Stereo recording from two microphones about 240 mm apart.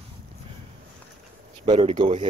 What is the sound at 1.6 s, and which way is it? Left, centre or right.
Speech, centre.